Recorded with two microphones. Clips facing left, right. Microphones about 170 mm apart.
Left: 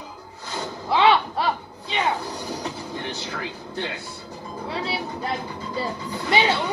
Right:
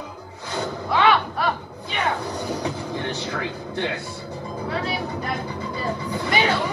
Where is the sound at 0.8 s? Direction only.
25° left (ahead or behind).